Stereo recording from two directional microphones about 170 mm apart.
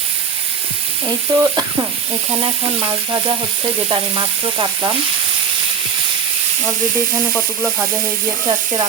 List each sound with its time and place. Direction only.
1.0 s sizzle: 20° right (ahead or behind)
2.8 s frying: 25° right (ahead or behind)
7.3 s sizzle: 10° right (ahead or behind)
8.4 s frying: 25° right (ahead or behind)